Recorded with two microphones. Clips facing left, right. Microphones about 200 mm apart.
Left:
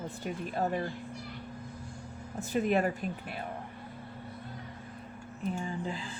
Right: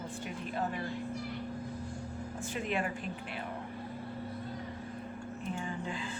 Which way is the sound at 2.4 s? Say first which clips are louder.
Left 7 dB; 40° left (ahead or behind).